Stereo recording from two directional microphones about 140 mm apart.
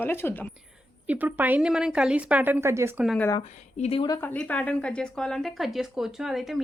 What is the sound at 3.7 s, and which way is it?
Speech, 45° left (ahead or behind).